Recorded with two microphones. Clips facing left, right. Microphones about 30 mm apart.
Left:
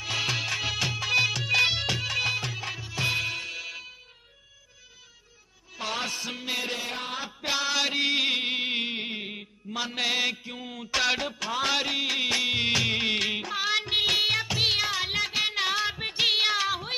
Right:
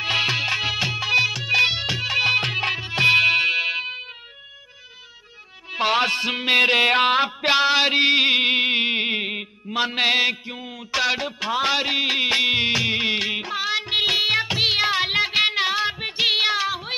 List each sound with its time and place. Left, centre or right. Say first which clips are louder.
0.0 s music: right 7 dB; right
1.1 s music: right 4 dB; centre; by 2.3 s right
2.3 s music: right 10 dB; right
5.7 s music: right 11 dB; right; by 11.3 s centre
11.3 s music: right 5 dB; right
12.6 s music: right 4 dB; centre
14.3 s music: right 5 dB; right
15.6 s child singing: right 5 dB; centre